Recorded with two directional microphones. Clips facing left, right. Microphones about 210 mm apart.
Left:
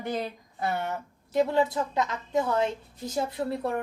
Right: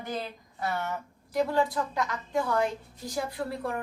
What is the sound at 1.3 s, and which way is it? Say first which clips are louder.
A woman's voice: left 2 dB; 25° left (ahead or behind).